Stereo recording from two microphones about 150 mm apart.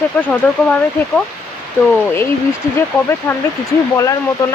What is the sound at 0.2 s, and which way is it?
Speech, 5° left (ahead or behind).